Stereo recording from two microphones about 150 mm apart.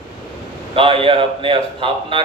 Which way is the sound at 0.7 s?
35° right (ahead or behind).